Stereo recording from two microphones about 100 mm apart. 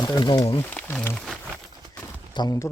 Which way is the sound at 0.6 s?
20° left (ahead or behind).